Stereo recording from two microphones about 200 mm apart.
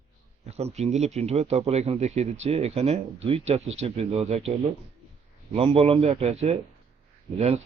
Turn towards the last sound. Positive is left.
turn(degrees=-30)  # may be behind; listen again after turning